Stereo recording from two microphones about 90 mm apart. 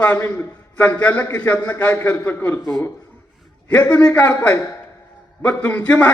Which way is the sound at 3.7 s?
15° left (ahead or behind).